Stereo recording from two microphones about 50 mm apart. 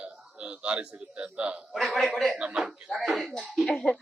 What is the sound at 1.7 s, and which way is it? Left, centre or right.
Speech, centre.